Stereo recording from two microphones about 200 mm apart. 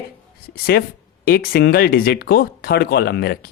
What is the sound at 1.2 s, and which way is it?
Speech, 50° left (ahead or behind).